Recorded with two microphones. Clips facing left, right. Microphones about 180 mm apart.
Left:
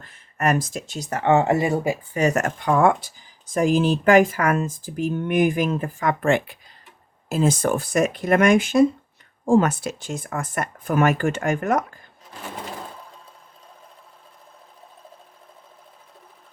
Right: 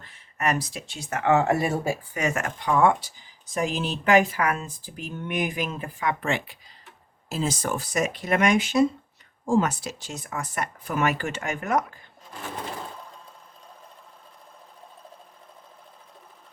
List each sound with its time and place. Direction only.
0.0 s speech: 50° left (ahead or behind); by 2.0 s 15° left (ahead or behind)
2.1 s speech: 40° left (ahead or behind)